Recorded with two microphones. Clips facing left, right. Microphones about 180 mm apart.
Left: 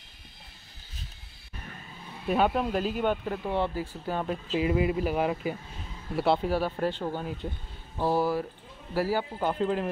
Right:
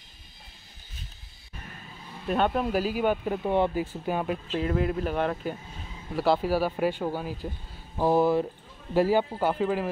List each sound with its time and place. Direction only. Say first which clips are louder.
2.2 s speech: even; 5° left (ahead or behind)
4.6 s speech: left 2 dB; 5° left (ahead or behind)
8.0 s speech: right 4 dB; 20° right (ahead or behind)
9.4 s speech: right 2 dB; 5° right (ahead or behind)